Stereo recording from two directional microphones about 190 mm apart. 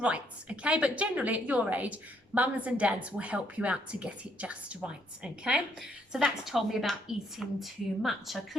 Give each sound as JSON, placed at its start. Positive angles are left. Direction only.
{"t": 0.0, "sound": "a woman's voice", "side_deg": -5}